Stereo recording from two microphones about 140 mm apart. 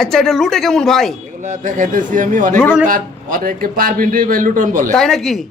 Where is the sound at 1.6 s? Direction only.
65° right (ahead or behind).